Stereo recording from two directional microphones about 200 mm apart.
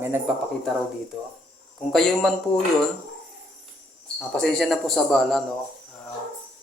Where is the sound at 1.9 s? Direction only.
Centre (ahead or behind).